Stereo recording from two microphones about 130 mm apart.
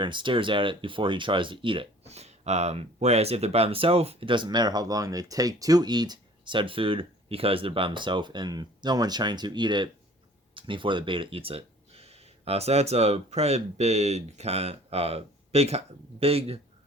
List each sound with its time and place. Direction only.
0.0 s speech: 40° right (ahead or behind)